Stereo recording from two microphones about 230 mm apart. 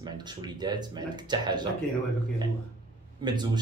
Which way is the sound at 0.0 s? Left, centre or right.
Centre.